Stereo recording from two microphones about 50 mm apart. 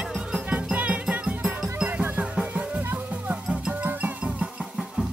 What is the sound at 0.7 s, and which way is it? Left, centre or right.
Music, right.